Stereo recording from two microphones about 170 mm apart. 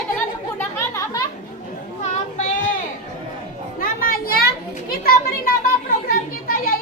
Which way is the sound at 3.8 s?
60° left (ahead or behind).